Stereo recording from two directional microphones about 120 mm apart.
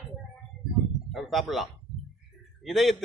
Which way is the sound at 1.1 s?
Centre (ahead or behind).